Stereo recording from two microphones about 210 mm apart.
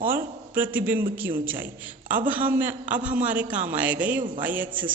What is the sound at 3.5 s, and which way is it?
Speech, 35° right (ahead or behind).